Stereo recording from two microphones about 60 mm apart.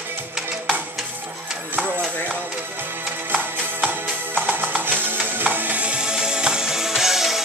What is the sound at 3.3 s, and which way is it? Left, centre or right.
Music, right.